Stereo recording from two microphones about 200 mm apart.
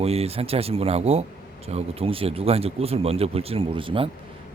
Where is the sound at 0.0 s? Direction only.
30° right (ahead or behind).